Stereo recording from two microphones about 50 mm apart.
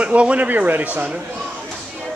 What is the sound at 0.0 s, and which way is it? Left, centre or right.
Speech, right.